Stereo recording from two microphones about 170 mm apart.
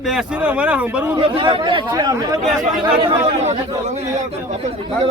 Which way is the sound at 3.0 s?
40° right (ahead or behind).